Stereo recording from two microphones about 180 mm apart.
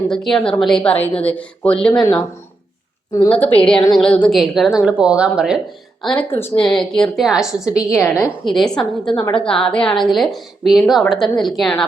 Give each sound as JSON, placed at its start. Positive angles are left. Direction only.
{"t": 0.1, "sound": "a woman's voice", "side_deg": 5}
{"t": 3.2, "sound": "a woman's voice", "side_deg": 10}
{"t": 9.1, "sound": "a woman's voice", "side_deg": 25}
{"t": 9.4, "sound": "a woman's voice", "side_deg": 5}